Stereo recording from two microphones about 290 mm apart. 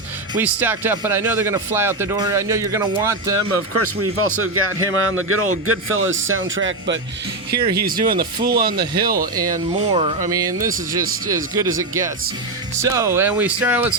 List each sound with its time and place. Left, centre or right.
0.3 s speech: centre
3.3 s a man's voice: right; by 13.9 s centre